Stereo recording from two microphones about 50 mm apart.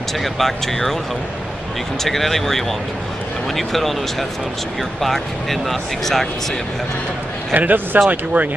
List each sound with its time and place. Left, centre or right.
0.2 s speech: centre
2.0 s speech: centre
7.5 s a man's voice: right